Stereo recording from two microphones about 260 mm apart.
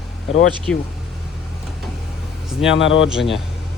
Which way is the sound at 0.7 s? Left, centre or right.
Centre.